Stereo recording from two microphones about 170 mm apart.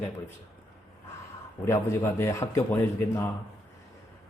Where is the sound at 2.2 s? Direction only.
15° left (ahead or behind).